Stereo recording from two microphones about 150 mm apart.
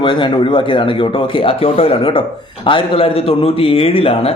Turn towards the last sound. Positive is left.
turn(degrees=40)  # may be behind; listen again after turning